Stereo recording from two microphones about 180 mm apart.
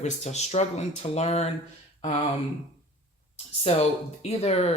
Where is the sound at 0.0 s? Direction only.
40° left (ahead or behind).